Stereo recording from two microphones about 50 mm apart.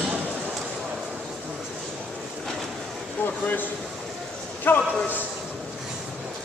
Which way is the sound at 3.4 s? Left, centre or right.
Left.